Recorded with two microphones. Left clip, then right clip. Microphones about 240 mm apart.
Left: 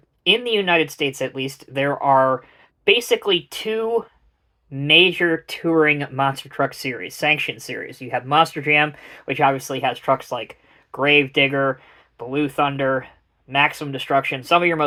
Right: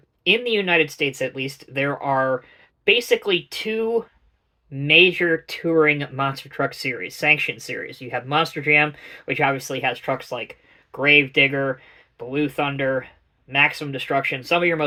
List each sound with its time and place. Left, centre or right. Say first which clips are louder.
0.3 s speech: left 1 dB; left